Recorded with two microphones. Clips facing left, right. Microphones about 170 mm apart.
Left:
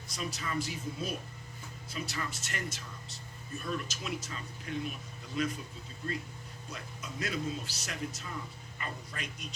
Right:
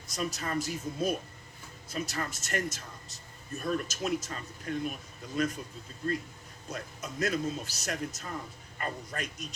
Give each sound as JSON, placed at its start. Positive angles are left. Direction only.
{"t": 0.1, "sound": "speech", "side_deg": -45}
{"t": 6.7, "sound": "speech", "side_deg": -45}